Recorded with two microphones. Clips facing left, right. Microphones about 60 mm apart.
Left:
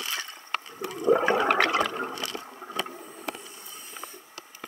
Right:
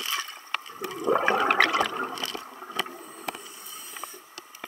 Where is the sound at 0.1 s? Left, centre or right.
Right.